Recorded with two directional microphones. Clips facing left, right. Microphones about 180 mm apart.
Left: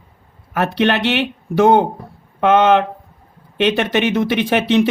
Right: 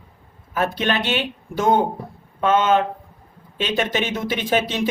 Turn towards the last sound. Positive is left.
turn(degrees=70)  # may be behind; listen again after turning